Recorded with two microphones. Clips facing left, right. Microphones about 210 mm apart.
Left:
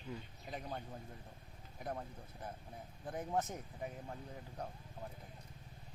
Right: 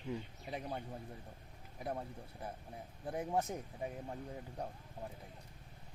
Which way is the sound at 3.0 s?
10° right (ahead or behind).